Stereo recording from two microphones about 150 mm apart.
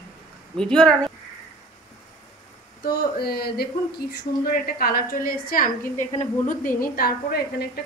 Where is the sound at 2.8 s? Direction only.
90° left.